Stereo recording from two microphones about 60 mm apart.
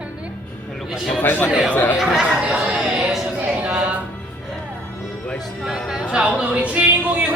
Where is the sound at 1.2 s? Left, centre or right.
Left.